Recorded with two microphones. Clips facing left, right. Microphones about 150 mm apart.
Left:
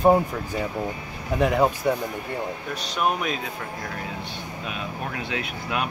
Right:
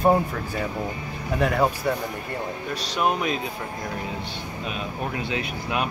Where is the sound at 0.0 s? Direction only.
10° left (ahead or behind).